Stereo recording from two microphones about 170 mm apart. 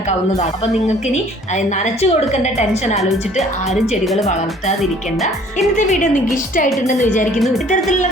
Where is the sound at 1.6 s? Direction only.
45° left (ahead or behind).